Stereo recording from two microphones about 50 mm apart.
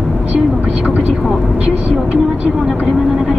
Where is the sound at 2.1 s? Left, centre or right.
Centre.